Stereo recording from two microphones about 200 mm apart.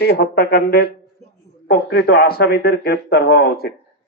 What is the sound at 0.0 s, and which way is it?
Speech, 55° left (ahead or behind).